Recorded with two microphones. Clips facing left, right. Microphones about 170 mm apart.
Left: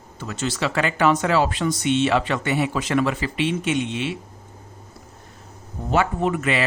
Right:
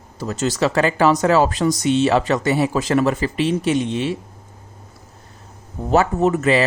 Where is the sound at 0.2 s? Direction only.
40° right (ahead or behind).